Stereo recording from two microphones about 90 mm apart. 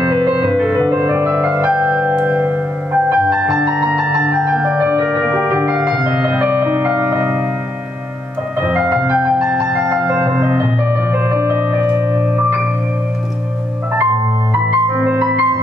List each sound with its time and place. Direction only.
0.0 s music: 15° right (ahead or behind)
1.5 s music: 10° right (ahead or behind)
5.3 s music: centre (ahead or behind); by 7.4 s 20° right (ahead or behind)
8.6 s music: 10° right (ahead or behind)
15.0 s music: 15° right (ahead or behind)